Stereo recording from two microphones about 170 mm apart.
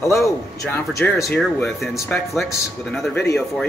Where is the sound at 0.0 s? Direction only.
15° left (ahead or behind).